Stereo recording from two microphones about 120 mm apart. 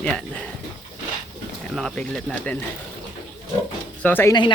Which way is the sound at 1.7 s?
5° left (ahead or behind).